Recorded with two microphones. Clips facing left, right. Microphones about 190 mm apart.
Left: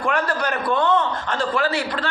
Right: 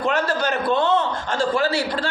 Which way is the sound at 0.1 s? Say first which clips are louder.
Even; 25° right (ahead or behind).